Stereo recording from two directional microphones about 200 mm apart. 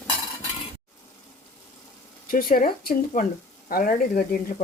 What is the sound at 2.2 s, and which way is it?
Speech, 45° left (ahead or behind).